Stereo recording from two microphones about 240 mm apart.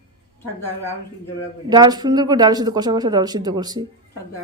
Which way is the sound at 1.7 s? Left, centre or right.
Centre.